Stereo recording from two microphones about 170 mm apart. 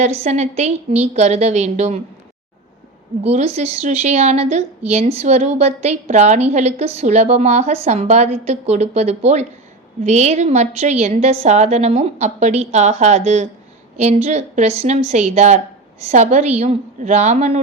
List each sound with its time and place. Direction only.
0.0 s a woman's voice: 40° right (ahead or behind)
3.2 s a woman's voice: 40° right (ahead or behind)